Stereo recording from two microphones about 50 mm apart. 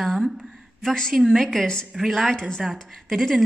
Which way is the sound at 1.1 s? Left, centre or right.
Centre.